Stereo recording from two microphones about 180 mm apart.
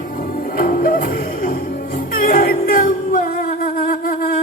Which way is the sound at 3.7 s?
50° left (ahead or behind).